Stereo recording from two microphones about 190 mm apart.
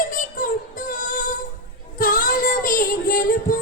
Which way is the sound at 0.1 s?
45° left (ahead or behind).